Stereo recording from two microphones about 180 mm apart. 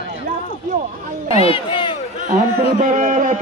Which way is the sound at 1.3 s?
30° left (ahead or behind).